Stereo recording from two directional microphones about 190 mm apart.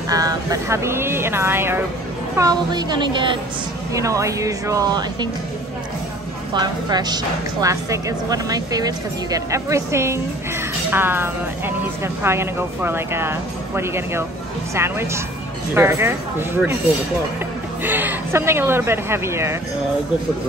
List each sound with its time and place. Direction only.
0.1 s a woman's voice: 20° right (ahead or behind)
6.5 s a woman's voice: 20° right (ahead or behind)
17.8 s speech: 10° right (ahead or behind)